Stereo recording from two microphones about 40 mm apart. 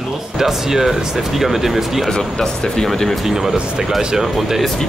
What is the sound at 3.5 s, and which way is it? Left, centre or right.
Speech, right.